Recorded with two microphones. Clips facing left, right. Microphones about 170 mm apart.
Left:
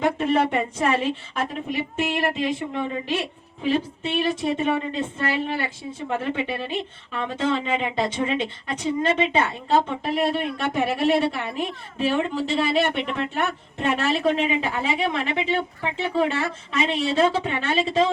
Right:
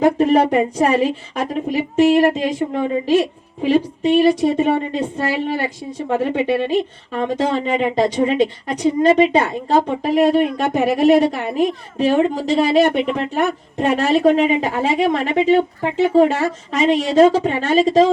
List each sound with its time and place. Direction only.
0.0 s a woman's voice: 40° right (ahead or behind)